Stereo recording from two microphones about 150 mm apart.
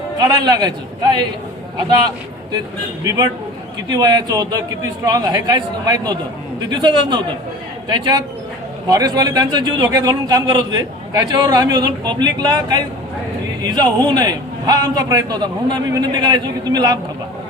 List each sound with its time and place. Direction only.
0.2 s a man's voice: 30° right (ahead or behind)
1.9 s a man's voice: 30° right (ahead or behind)
8.9 s a man's voice: 25° right (ahead or behind)